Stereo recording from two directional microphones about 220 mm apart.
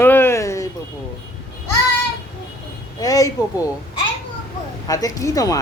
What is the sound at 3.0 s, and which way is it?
A child's voice, 15° left (ahead or behind).